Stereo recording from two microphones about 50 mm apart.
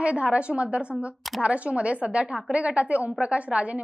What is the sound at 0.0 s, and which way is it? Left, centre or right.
A woman's voice, right.